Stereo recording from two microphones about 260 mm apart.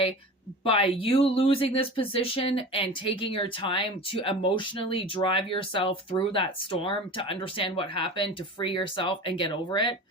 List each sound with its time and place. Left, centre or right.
0.6 s speech: left